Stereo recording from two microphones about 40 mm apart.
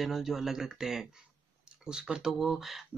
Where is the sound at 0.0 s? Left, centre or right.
Centre.